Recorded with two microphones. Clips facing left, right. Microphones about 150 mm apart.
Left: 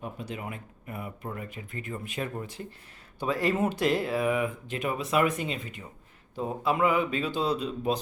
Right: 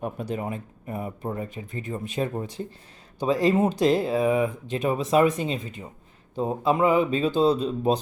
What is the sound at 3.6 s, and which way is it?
Speech, 35° right (ahead or behind).